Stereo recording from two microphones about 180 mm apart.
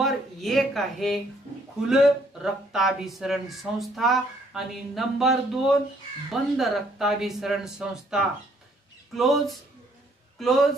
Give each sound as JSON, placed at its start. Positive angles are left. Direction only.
{"t": 0.0, "sound": "speech", "side_deg": 0}